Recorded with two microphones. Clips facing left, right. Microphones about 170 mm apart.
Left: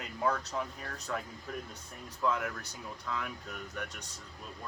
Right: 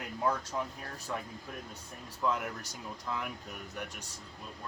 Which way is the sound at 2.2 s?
15° right (ahead or behind).